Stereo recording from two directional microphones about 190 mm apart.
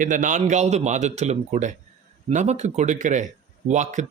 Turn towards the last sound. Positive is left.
turn(degrees=-40)  # may be behind; listen again after turning